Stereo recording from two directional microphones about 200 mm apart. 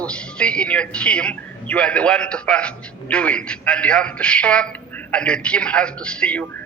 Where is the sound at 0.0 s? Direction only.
5° left (ahead or behind).